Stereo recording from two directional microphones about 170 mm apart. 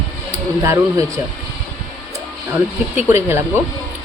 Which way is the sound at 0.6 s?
15° right (ahead or behind).